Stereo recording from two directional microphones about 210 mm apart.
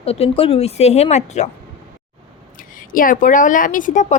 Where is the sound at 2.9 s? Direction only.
40° left (ahead or behind).